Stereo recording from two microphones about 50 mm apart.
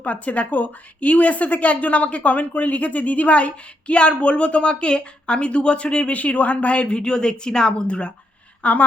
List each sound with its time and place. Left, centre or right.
0.0 s a woman's voice: left